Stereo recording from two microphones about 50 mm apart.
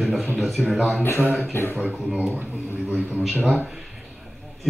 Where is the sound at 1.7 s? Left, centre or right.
Right.